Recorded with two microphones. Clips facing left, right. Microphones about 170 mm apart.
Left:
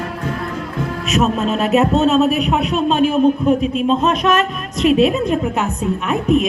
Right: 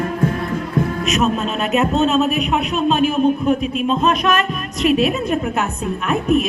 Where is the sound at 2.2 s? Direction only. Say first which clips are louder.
Left 3 dB; 35° left (ahead or behind).